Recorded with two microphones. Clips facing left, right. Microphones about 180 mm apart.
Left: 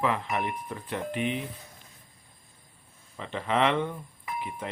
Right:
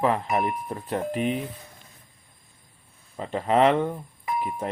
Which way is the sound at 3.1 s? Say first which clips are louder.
Right 6 dB; 40° right (ahead or behind).